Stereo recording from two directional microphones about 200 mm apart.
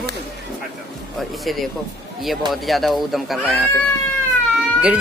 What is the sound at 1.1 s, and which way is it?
Speech, centre (ahead or behind).